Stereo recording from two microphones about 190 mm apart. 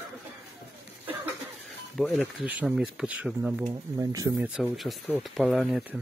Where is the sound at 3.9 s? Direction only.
20° right (ahead or behind).